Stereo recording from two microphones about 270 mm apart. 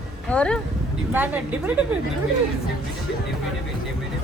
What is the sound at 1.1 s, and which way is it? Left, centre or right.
Speech, centre.